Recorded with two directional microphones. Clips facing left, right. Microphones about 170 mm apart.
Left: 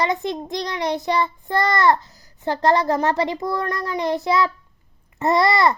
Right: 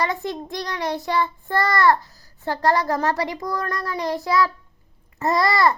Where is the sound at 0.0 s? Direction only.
20° left (ahead or behind).